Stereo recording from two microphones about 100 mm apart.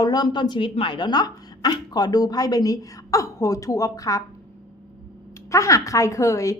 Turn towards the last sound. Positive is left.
turn(degrees=30)  # may be behind; listen again after turning